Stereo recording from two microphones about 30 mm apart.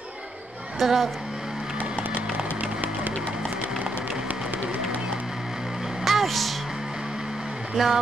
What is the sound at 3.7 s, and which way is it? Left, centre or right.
Music, right.